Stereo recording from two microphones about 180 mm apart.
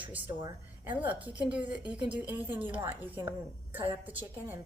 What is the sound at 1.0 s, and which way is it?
A woman's voice, 10° right (ahead or behind).